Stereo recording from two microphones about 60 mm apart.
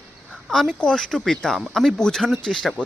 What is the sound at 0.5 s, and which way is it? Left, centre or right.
Speech, centre.